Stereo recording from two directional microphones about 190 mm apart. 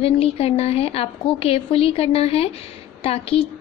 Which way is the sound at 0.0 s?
30° left (ahead or behind).